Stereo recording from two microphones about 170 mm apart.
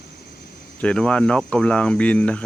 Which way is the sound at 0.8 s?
5° left (ahead or behind).